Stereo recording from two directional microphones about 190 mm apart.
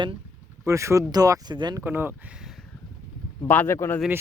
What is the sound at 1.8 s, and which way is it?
Speech, 10° right (ahead or behind).